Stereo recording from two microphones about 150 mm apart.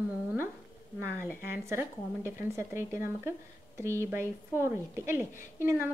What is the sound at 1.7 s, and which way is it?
Speech, 15° right (ahead or behind).